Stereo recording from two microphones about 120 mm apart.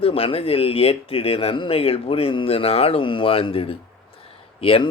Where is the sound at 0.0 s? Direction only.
50° left (ahead or behind).